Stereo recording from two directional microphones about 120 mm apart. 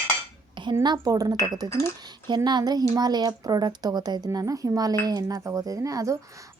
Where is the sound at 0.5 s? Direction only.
40° right (ahead or behind).